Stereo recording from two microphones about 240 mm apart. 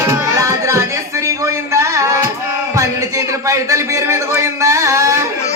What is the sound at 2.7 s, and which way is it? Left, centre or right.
A man's voice, centre.